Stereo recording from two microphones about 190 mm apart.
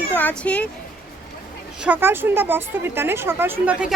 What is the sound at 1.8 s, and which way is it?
A woman's voice, 10° right (ahead or behind).